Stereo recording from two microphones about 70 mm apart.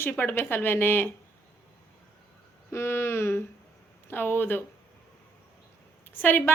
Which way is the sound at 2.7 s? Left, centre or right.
Left.